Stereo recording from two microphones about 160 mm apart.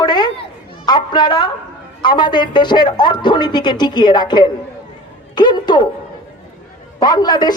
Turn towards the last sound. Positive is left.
turn(degrees=25)  # may be behind; listen again after turning